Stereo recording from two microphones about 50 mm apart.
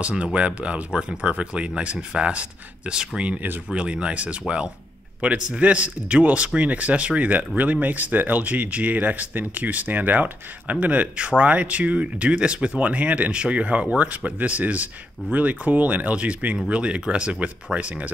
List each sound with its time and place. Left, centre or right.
0.2 s a man's voice: right